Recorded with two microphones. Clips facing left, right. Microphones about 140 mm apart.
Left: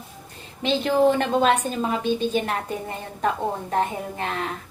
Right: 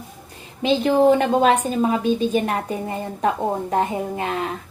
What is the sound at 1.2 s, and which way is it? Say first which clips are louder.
A woman's voice: right 3 dB; 10° right (ahead or behind).